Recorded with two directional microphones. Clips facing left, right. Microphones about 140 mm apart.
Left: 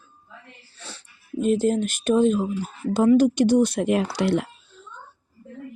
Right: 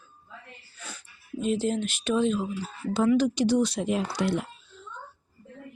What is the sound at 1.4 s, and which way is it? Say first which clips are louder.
Speech: left 6 dB; 45° left (ahead or behind).